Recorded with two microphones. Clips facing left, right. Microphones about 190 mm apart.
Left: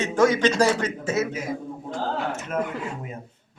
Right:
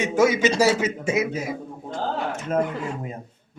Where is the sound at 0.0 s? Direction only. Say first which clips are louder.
Even; 10° right (ahead or behind).